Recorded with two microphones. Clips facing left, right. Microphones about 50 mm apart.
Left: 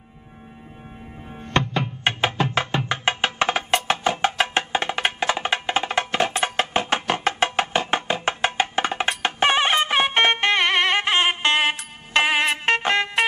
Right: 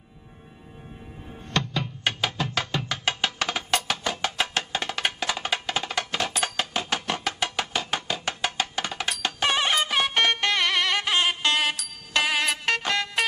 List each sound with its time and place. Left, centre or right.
1.4 s music: left